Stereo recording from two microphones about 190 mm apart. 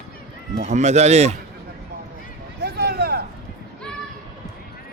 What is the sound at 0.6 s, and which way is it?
Speech, 40° right (ahead or behind).